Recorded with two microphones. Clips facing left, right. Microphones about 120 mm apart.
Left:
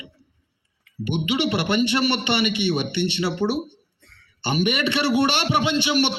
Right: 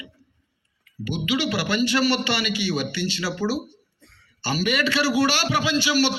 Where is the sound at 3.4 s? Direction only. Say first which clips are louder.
Left 2 dB; 60° left (ahead or behind).